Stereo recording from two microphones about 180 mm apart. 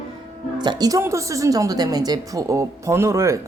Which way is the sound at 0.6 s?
25° right (ahead or behind).